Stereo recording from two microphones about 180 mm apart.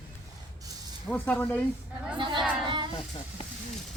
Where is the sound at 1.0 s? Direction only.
10° left (ahead or behind).